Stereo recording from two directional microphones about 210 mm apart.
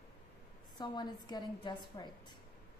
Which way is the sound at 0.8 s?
20° left (ahead or behind).